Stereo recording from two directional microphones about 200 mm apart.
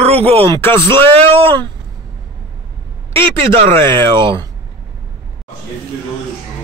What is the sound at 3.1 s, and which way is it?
Speech, 25° right (ahead or behind).